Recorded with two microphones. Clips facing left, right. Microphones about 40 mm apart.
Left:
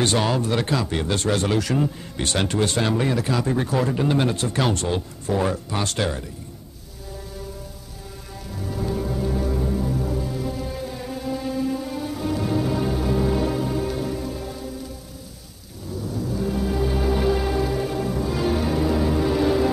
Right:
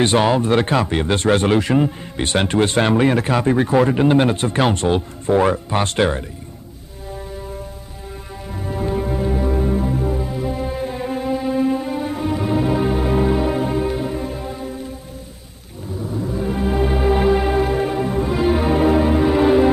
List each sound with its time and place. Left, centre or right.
0.0 s a man's voice: right
8.5 s music: right
16.0 s music: right